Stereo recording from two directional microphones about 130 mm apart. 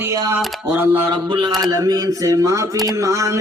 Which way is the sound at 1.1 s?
35° right (ahead or behind).